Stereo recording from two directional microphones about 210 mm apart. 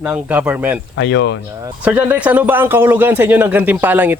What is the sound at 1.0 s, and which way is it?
Speech, 55° left (ahead or behind).